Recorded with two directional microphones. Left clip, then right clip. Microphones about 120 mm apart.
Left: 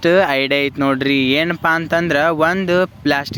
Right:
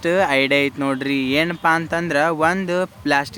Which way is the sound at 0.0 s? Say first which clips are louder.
Left 3 dB; 35° left (ahead or behind).